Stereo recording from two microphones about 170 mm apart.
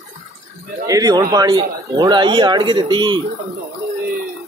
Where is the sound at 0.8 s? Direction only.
20° right (ahead or behind).